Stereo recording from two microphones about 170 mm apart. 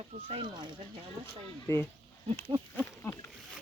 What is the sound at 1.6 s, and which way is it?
Speech, 15° left (ahead or behind).